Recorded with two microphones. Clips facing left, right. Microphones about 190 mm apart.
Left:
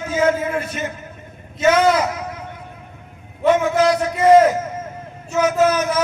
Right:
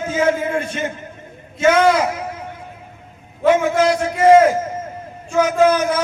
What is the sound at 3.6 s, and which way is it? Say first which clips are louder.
A man's voice: even; 30° right (ahead or behind).